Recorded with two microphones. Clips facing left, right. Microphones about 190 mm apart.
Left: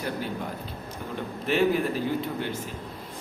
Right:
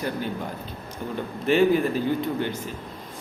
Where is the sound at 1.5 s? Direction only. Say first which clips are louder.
Right 4 dB; 5° left (ahead or behind).